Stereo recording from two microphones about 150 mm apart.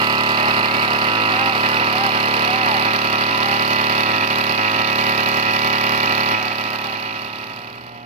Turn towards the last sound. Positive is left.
turn(degrees=-45)  # may be behind; listen again after turning